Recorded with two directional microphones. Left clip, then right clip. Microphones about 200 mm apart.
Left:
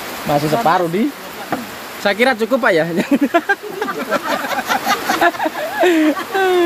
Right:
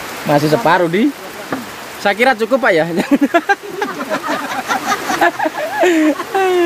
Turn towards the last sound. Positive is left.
turn(degrees=-5)  # may be behind; listen again after turning